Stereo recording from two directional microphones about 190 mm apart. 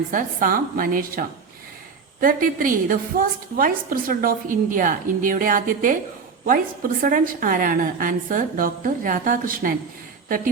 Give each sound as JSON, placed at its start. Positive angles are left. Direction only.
{"t": 0.1, "sound": "a woman's voice", "side_deg": -45}